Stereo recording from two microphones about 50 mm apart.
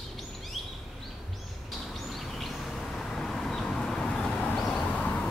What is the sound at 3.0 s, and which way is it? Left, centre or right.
Vehicle, centre.